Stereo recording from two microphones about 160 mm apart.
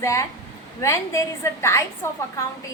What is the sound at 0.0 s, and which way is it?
A woman's voice, 20° left (ahead or behind).